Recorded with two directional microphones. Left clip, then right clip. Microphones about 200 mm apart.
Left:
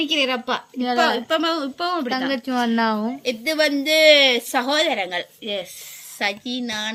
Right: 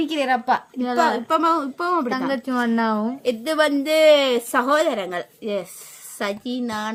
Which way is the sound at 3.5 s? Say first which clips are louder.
Left 1 dB; 50° right (ahead or behind).